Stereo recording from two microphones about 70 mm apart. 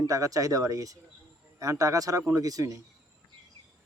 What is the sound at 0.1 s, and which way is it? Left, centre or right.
A man's voice, right.